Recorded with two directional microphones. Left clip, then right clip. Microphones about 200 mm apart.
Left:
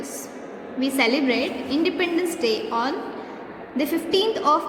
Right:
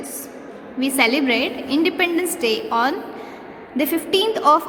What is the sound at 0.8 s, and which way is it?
A woman's voice, 20° right (ahead or behind).